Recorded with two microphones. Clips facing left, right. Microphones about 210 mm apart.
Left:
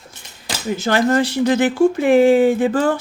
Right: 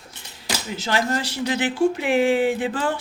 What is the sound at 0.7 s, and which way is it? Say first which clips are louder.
Speech: left 8 dB; 50° left (ahead or behind).